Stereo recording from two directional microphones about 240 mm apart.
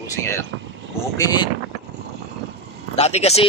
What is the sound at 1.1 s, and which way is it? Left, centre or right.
Speech, centre.